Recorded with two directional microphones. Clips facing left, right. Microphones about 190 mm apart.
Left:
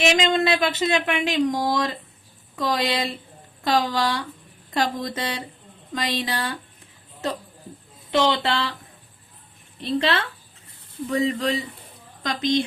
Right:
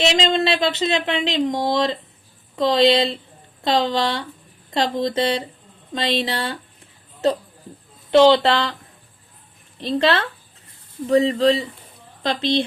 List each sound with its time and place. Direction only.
0.2 s speech: 25° right (ahead or behind)
8.1 s speech: 30° right (ahead or behind)
9.7 s speech: 35° right (ahead or behind)